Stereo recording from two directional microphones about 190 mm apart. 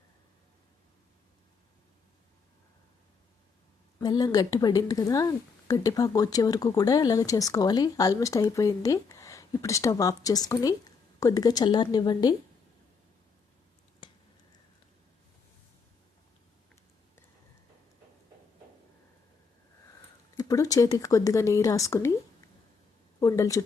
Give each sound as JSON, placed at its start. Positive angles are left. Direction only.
{"t": 4.0, "sound": "speech", "side_deg": 20}
{"t": 14.0, "sound": "a sound", "side_deg": 25}
{"t": 20.3, "sound": "speech", "side_deg": 20}
{"t": 23.2, "sound": "speech", "side_deg": 15}